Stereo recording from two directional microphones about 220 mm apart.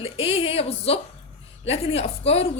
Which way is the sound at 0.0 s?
25° left (ahead or behind).